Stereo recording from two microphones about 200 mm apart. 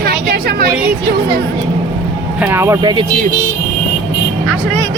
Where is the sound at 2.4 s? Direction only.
10° right (ahead or behind).